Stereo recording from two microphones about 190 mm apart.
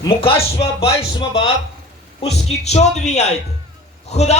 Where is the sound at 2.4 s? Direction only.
35° left (ahead or behind).